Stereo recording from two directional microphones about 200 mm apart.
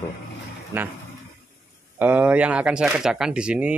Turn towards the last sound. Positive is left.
turn(degrees=-5)  # may be behind; listen again after turning